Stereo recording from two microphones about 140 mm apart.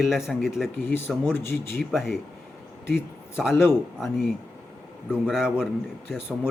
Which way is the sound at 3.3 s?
5° right (ahead or behind).